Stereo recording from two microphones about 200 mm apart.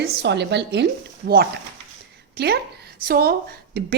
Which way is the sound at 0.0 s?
60° right (ahead or behind).